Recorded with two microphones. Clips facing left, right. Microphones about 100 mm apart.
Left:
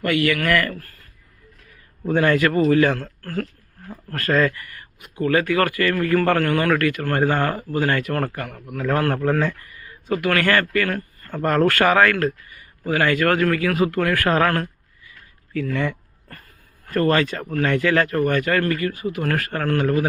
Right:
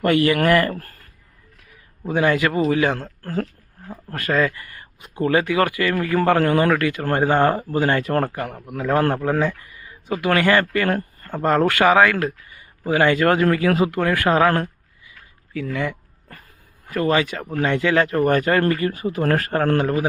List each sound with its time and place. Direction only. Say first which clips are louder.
0.0 s a man's voice: right 3 dB; 35° right (ahead or behind)
2.0 s speech: left 1 dB; 15° right (ahead or behind)
4.5 s speech: even; 25° right (ahead or behind)
9.2 s speech: even; 10° right (ahead or behind)
10.8 s speech: right 4 dB; 30° right (ahead or behind)
15.5 s speech: left 1 dB; 10° right (ahead or behind)
18.3 s a man's voice: right 3 dB; 35° right (ahead or behind)